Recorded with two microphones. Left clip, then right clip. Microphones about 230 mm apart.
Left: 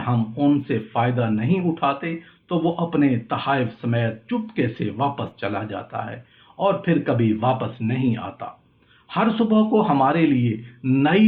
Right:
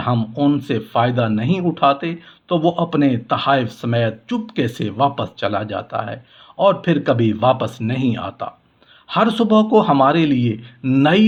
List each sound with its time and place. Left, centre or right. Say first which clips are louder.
0.0 s speech: right 4 dB; right